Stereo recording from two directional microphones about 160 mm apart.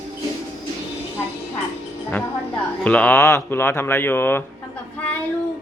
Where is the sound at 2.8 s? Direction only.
10° left (ahead or behind).